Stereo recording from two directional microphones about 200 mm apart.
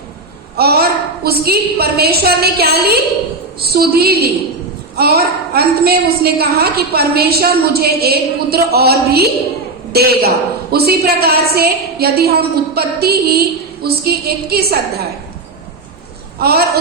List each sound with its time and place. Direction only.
0.5 s a woman's voice: 50° right (ahead or behind)
16.4 s a woman's voice: 50° right (ahead or behind)